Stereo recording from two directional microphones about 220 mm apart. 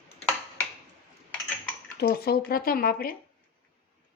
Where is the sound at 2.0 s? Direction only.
45° left (ahead or behind).